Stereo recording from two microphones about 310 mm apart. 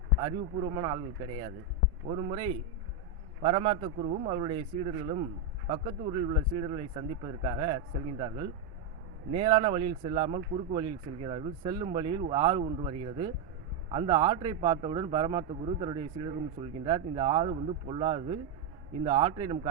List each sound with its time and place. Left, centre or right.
0.2 s a man's voice: centre
2.0 s a man's voice: right
9.3 s a man's voice: centre